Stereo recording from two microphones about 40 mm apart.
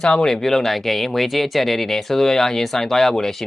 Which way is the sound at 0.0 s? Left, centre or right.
Centre.